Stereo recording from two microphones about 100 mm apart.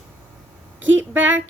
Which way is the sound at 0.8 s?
20° right (ahead or behind).